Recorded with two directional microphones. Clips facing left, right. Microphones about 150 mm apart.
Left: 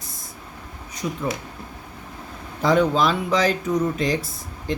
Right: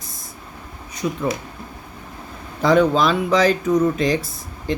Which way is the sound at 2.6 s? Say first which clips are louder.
Right 3 dB; 90° right.